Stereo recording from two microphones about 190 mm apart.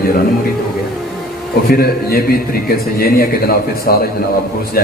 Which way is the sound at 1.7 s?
55° left (ahead or behind).